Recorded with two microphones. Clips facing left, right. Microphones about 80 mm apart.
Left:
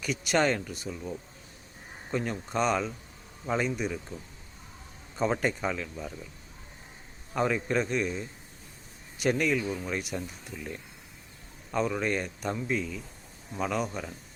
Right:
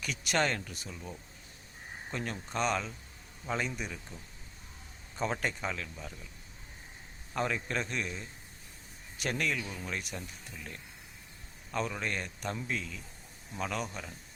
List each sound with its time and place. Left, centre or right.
0.0 s a man's voice: centre
5.1 s a man's voice: centre
7.3 s a man's voice: centre